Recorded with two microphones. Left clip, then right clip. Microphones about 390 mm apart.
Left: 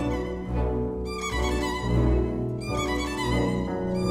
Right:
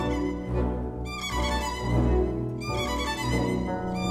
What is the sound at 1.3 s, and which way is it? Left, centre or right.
Music, right.